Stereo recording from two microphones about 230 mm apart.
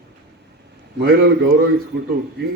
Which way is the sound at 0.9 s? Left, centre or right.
Right.